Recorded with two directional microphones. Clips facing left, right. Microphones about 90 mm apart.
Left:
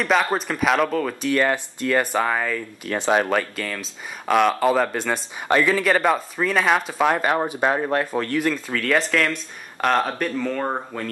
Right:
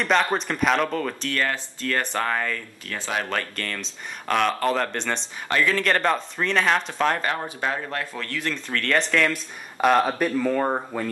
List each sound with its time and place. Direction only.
0.0 s speech: 5° left (ahead or behind)
1.3 s speech: 15° left (ahead or behind)
2.9 s speech: 25° left (ahead or behind)
3.3 s speech: 10° left (ahead or behind)
7.6 s speech: 25° left (ahead or behind); by 11.1 s 10° right (ahead or behind)